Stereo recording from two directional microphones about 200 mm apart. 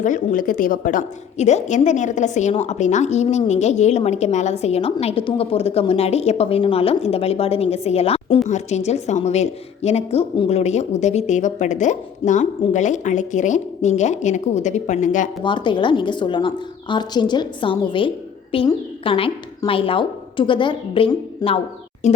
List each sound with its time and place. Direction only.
0.0 s a woman's voice: 40° left (ahead or behind)
15.4 s a woman's voice: 25° left (ahead or behind)
22.0 s music: 35° left (ahead or behind)